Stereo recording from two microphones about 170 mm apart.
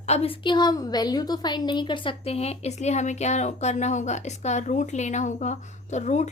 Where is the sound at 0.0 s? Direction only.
40° left (ahead or behind).